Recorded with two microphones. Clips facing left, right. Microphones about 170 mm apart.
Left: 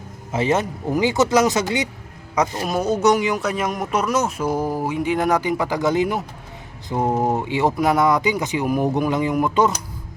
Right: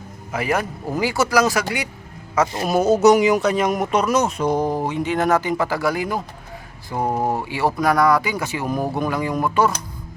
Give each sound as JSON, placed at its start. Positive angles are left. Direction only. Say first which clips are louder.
{"t": 0.3, "sound": "speech", "louder": "left 2 dB", "side_deg": 25}
{"t": 2.6, "sound": "speech", "louder": "right 5 dB", "side_deg": -5}